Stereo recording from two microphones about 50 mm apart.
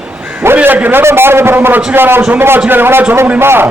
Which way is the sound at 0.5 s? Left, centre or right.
Right.